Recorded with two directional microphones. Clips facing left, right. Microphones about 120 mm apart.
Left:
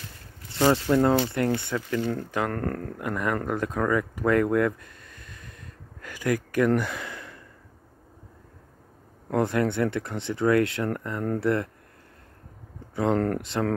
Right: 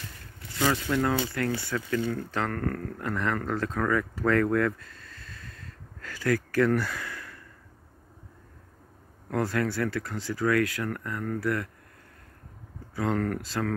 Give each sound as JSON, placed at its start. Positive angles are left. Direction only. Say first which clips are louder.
{"t": 0.5, "sound": "speech", "louder": "left 5 dB", "side_deg": 30}
{"t": 9.3, "sound": "speech", "louder": "left 4 dB", "side_deg": 20}
{"t": 12.9, "sound": "speech", "louder": "left 4 dB", "side_deg": 25}